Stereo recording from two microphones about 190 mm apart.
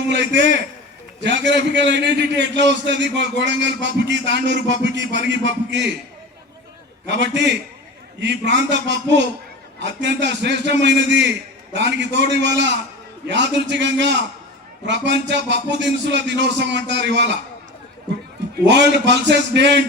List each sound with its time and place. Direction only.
1.5 s a man's voice: 65° right (ahead or behind)
7.1 s a man's voice: 65° right (ahead or behind)
18.6 s a man's voice: 65° right (ahead or behind)